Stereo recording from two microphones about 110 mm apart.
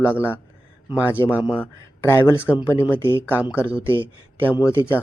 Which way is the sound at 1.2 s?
30° right (ahead or behind).